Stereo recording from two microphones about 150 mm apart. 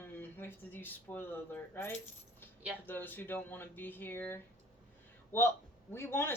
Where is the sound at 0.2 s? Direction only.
15° left (ahead or behind).